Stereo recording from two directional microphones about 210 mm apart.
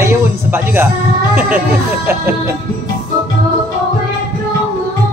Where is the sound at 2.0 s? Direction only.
10° right (ahead or behind).